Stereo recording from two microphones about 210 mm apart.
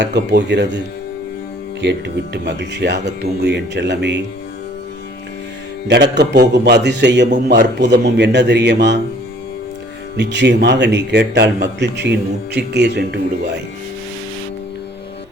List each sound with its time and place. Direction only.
0.0 s speech: 55° right (ahead or behind)
1.8 s speech: 55° right (ahead or behind)
5.9 s a man's voice: 55° right (ahead or behind)
10.2 s a man's voice: 55° right (ahead or behind)